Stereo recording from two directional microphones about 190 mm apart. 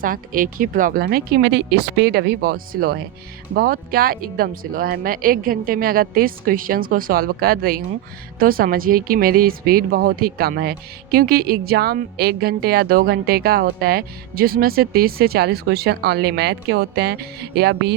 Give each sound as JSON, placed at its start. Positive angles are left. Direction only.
{"t": 0.0, "sound": "speech", "side_deg": -45}